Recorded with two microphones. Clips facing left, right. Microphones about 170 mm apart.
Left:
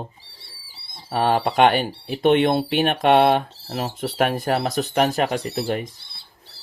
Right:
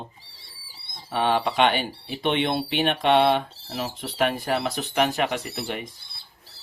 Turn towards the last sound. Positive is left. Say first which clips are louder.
# left 6 dB
turn(degrees=40)  # may be behind; listen again after turning